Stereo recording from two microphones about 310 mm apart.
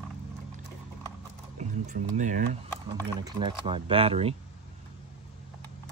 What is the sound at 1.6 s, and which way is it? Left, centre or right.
Speech, right.